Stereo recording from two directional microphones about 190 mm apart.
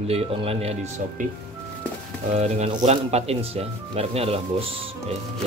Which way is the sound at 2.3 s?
35° right (ahead or behind).